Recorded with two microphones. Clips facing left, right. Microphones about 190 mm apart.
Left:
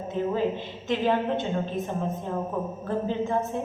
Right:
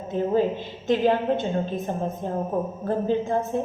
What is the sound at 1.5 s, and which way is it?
A woman's voice, 35° right (ahead or behind).